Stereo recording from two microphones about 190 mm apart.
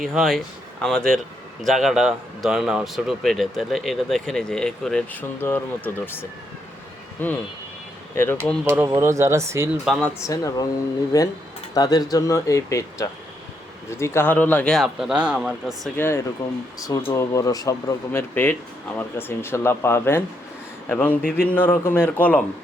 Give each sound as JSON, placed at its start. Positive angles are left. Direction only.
{"t": 0.0, "sound": "speech", "side_deg": 0}
{"t": 8.6, "sound": "speech", "side_deg": -10}
{"t": 9.8, "sound": "speech", "side_deg": 0}
{"t": 10.2, "sound": "speech", "side_deg": 15}
{"t": 16.0, "sound": "speech", "side_deg": 10}
{"t": 21.2, "sound": "a sound", "side_deg": 50}
{"t": 21.5, "sound": "speech", "side_deg": 10}